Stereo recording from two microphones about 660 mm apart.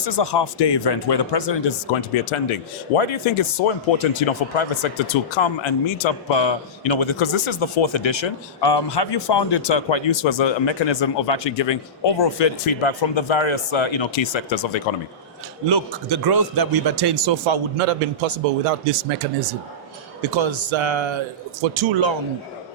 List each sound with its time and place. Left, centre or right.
0.0 s speech: left
3.0 s speech: left
15.7 s a man's voice: right
20.3 s a man's voice: right